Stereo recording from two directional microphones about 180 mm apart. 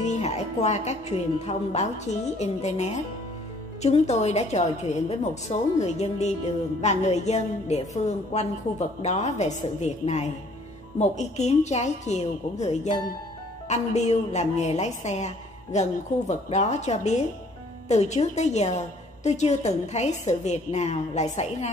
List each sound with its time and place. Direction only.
0.0 s a woman's voice: 40° left (ahead or behind)